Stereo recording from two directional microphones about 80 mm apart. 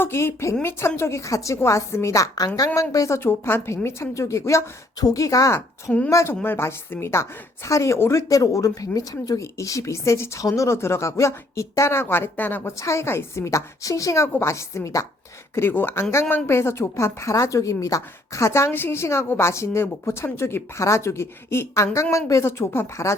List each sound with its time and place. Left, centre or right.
0.0 s a woman's voice: left
3.2 s a woman's voice: left
6.4 s a woman's voice: left
12.7 s a woman's voice: left
15.5 s a woman's voice: left